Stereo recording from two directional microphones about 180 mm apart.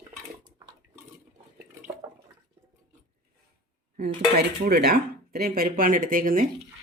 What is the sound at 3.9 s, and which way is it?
Speech, 55° right (ahead or behind).